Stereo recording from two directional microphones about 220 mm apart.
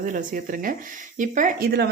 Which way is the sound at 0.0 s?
35° right (ahead or behind).